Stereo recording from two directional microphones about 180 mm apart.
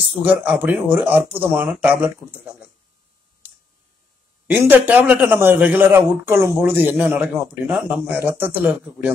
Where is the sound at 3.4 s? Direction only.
10° right (ahead or behind).